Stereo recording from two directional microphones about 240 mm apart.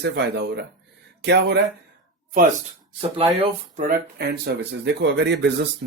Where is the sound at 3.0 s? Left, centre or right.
Right.